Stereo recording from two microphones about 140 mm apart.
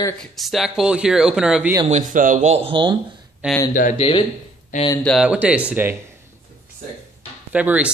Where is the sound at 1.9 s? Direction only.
65° right (ahead or behind); by 3.0 s 35° right (ahead or behind).